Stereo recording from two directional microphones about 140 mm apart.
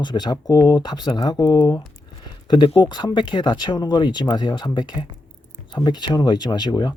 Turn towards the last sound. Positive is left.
turn(degrees=30)  # may be behind; listen again after turning